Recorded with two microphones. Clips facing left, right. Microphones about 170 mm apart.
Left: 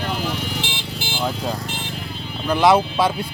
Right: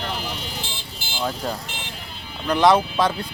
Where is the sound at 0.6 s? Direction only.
80° left.